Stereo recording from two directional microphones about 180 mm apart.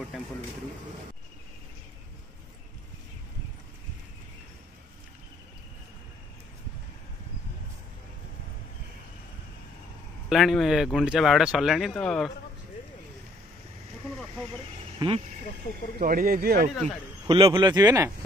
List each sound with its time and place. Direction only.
10.3 s speech: centre (ahead or behind)
15.0 s speech: 30° right (ahead or behind)
16.0 s speech: 55° right (ahead or behind)
17.3 s speech: 30° right (ahead or behind)